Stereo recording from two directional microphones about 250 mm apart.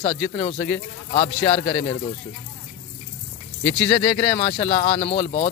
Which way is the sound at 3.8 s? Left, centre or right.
Centre.